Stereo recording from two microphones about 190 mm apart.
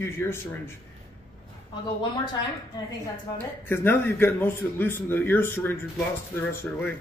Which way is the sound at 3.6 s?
10° left (ahead or behind).